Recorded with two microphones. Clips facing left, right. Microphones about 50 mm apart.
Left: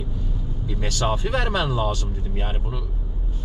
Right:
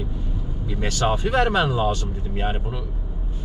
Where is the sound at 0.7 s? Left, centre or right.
Right.